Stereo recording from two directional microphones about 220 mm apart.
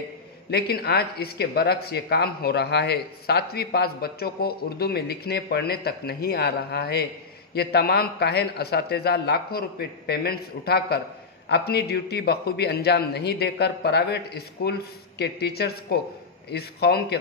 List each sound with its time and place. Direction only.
0.5 s speech: 45° left (ahead or behind)